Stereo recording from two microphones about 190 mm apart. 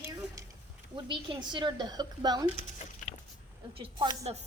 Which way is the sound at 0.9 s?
25° right (ahead or behind).